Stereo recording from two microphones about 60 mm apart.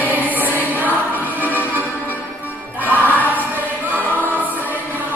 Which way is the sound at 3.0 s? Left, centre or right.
Left.